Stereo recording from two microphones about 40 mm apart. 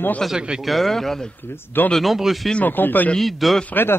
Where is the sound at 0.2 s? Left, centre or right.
Centre.